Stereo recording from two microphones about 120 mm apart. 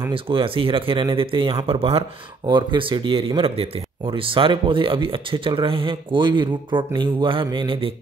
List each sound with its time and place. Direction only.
0.1 s speech: 50° right (ahead or behind)
2.4 s speech: 40° right (ahead or behind)